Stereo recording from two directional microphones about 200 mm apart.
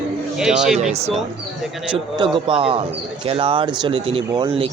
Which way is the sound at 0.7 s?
35° right (ahead or behind).